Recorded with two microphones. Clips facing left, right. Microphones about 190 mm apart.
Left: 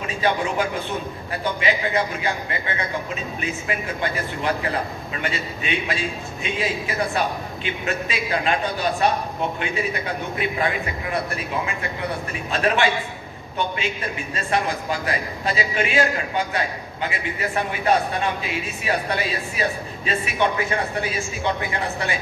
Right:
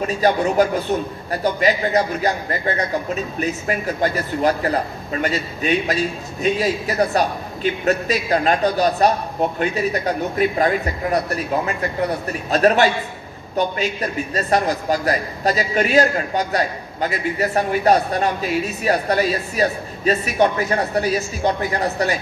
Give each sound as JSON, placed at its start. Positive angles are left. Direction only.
{"t": 0.0, "sound": "speech", "side_deg": -40}